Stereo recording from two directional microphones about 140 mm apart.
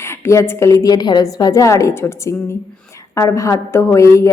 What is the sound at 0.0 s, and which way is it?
A woman's voice, 20° left (ahead or behind).